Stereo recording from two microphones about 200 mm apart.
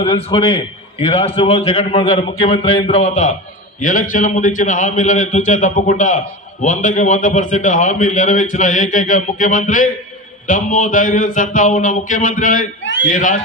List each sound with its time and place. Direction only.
0.0 s a man's voice: 25° left (ahead or behind); by 12.6 s 40° left (ahead or behind)
12.8 s a man's voice: 65° left (ahead or behind)
13.1 s a man's voice: 40° left (ahead or behind)